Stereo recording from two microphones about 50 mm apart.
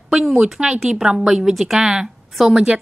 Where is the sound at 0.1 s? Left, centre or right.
Centre.